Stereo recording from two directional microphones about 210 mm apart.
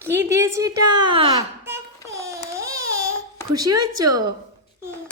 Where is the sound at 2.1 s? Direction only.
15° right (ahead or behind).